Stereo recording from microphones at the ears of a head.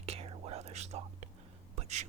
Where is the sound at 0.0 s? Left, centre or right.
Right.